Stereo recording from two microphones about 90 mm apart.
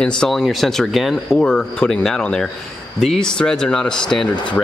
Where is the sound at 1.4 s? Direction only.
10° left (ahead or behind).